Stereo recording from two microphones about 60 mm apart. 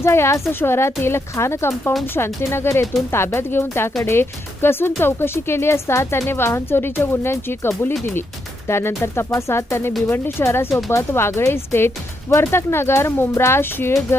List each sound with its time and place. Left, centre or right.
0.0 s speech: left